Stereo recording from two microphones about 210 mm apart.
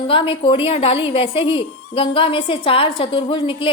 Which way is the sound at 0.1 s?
25° left (ahead or behind).